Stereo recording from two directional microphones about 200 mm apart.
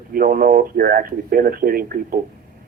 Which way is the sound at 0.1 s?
45° right (ahead or behind).